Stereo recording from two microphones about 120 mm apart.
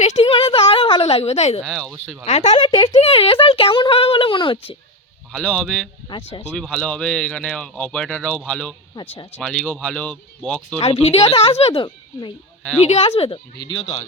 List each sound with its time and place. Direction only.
0.0 s a sound: 75° left (ahead or behind)
0.3 s a sound: 50° left (ahead or behind)
1.6 s a man's voice: 5° left (ahead or behind)
2.2 s a woman's voice: 65° left (ahead or behind)
2.6 s speech: 40° left (ahead or behind)
3.0 s speech: 55° left (ahead or behind)
5.3 s a man's voice: 10° left (ahead or behind)
6.1 s speech: 45° left (ahead or behind)
6.5 s speech: 5° left (ahead or behind)
8.9 s speech: 40° left (ahead or behind)
9.4 s speech: 5° left (ahead or behind)
11.1 s a woman's voice: 55° left (ahead or behind)